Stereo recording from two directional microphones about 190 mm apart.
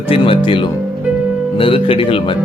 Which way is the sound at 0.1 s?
25° left (ahead or behind).